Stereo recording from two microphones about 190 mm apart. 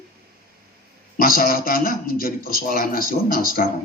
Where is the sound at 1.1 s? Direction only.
50° left (ahead or behind).